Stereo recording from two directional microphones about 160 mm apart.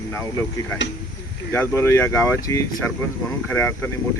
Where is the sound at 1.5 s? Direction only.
15° left (ahead or behind).